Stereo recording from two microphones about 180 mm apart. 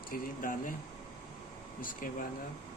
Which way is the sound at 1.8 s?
50° left (ahead or behind).